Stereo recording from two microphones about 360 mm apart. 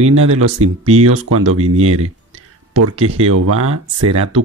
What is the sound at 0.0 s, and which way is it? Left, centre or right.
Speech, right.